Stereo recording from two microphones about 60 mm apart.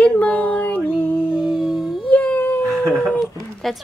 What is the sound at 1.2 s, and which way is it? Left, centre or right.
Dog, centre.